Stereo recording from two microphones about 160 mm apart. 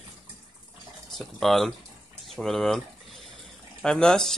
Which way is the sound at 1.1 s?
Centre (ahead or behind).